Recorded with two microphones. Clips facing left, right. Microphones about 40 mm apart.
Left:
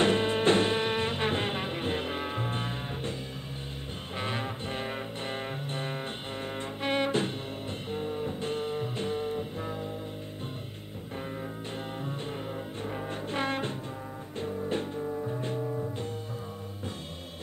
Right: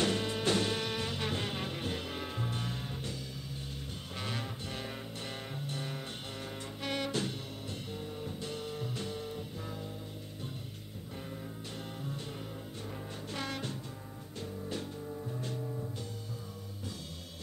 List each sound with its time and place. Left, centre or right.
0.0 s music: left
4.2 s music: left
12.0 s music: left
12.9 s brass instrument: left
14.4 s music: left